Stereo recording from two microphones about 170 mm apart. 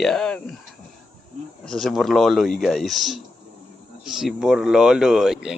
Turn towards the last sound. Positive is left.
turn(degrees=-5)  # may be behind; listen again after turning